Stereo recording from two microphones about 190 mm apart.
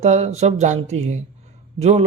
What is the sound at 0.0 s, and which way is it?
A man's voice, 35° right (ahead or behind).